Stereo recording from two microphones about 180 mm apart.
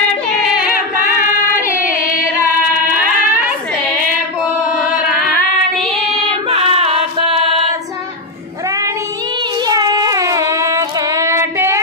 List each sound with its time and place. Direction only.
1.4 s a sound: 15° left (ahead or behind)
5.3 s child singing: centre (ahead or behind)
6.5 s music: 30° right (ahead or behind)
9.7 s child singing: 20° right (ahead or behind)